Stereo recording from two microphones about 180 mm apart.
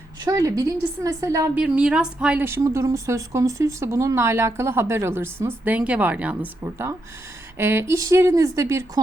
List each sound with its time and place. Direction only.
0.3 s a woman's voice: 20° right (ahead or behind)
1.5 s a woman's voice: 5° right (ahead or behind)